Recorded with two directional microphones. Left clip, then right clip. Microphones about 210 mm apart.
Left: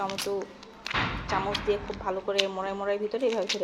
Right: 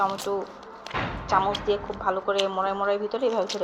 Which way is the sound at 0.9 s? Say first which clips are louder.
Left 1 dB; 15° left (ahead or behind).